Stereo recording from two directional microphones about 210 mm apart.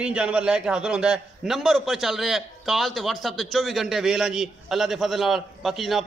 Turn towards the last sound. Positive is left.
turn(degrees=0)  # may be behind; listen again after turning